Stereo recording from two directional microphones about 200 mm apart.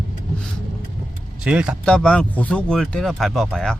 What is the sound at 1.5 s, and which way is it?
Speech, 5° right (ahead or behind).